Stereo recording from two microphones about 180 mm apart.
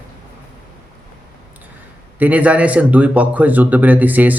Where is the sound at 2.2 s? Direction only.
10° right (ahead or behind).